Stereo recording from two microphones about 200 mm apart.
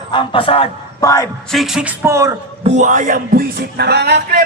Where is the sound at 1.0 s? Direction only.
15° left (ahead or behind).